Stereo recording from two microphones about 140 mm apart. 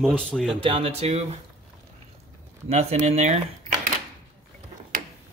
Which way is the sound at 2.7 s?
45° right (ahead or behind).